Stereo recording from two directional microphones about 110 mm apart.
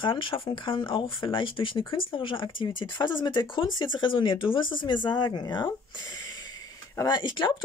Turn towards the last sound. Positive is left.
turn(degrees=45)  # may be behind; listen again after turning